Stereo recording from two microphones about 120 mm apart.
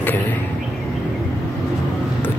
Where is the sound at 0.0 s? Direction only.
15° left (ahead or behind).